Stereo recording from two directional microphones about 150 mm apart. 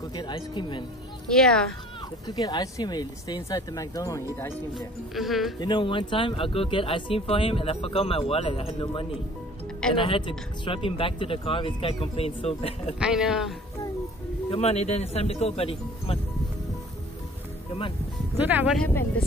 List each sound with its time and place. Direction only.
0.1 s speech: 30° left (ahead or behind)
1.3 s speech: 5° left (ahead or behind)
2.2 s speech: 25° left (ahead or behind)
4.7 s speech: centre (ahead or behind)
5.6 s speech: 30° left (ahead or behind)
13.0 s speech: 5° right (ahead or behind)
14.5 s speech: 45° left (ahead or behind)
17.7 s speech: 35° left (ahead or behind)
18.4 s speech: 10° right (ahead or behind)
18.8 s speech: 10° left (ahead or behind)